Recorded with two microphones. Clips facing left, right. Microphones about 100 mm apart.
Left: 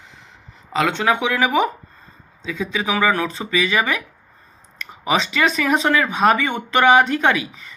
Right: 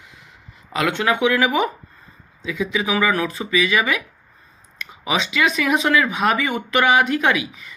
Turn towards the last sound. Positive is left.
turn(degrees=30)  # may be behind; listen again after turning